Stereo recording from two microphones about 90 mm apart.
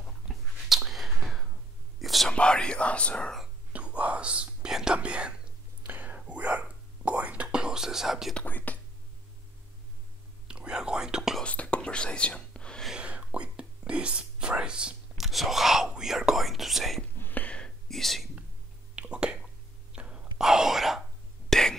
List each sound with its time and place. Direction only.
0.3 s a sound: centre (ahead or behind)
2.0 s whispering: centre (ahead or behind)
2.3 s whispering: 10° left (ahead or behind)
3.7 s whispering: 15° right (ahead or behind)
8.4 s whispering: 20° left (ahead or behind)
10.5 s whispering: 10° right (ahead or behind)
11.4 s whispering: 15° left (ahead or behind)
12.8 s whispering: 10° right (ahead or behind)
17.2 s whispering: 20° left (ahead or behind); by 18.3 s centre (ahead or behind)
18.9 s whispering: 10° right (ahead or behind); by 21.7 s 5° left (ahead or behind)